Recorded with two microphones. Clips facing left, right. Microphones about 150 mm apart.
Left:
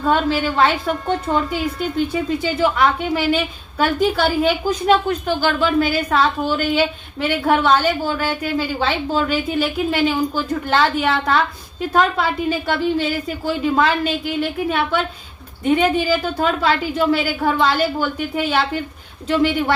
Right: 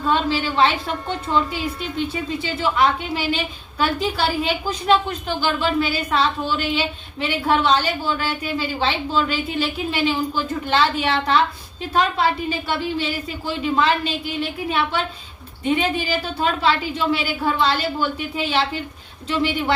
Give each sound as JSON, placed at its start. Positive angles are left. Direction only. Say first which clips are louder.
{"t": 0.1, "sound": "speech", "louder": "left 3 dB", "side_deg": 50}
{"t": 1.8, "sound": "speech", "louder": "left 5 dB", "side_deg": 45}